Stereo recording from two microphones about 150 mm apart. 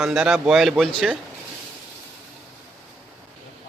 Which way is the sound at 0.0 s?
5° right (ahead or behind).